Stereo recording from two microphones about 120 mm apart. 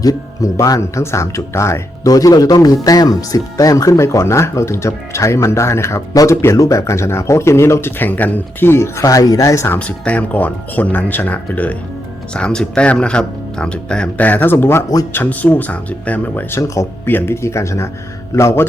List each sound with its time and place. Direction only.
0.0 s speech: 30° left (ahead or behind)
9.7 s speech: 10° left (ahead or behind)
16.6 s speech: 25° left (ahead or behind)